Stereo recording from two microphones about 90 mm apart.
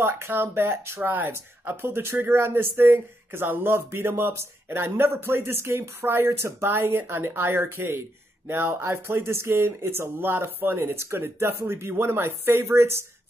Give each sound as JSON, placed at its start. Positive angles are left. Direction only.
{"t": 0.0, "sound": "speech", "side_deg": -25}